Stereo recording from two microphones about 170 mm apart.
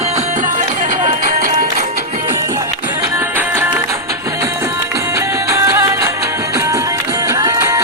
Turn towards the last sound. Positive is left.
turn(degrees=-20)  # may be behind; listen again after turning